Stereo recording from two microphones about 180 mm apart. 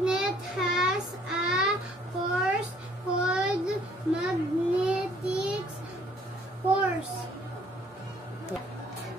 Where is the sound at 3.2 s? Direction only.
5° right (ahead or behind).